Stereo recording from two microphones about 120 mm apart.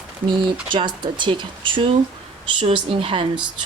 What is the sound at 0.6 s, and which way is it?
Speech, 40° right (ahead or behind).